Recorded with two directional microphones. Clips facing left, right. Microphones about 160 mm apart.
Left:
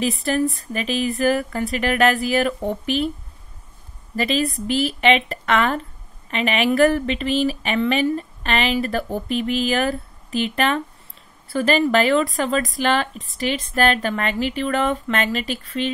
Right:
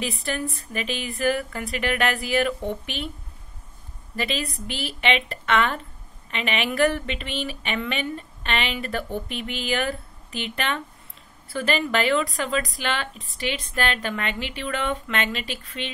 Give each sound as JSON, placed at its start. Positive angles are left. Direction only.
{"t": 0.0, "sound": "speech", "side_deg": 40}
{"t": 4.2, "sound": "speech", "side_deg": 40}